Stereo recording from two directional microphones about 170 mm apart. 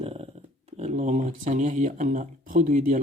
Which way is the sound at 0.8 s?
45° right (ahead or behind).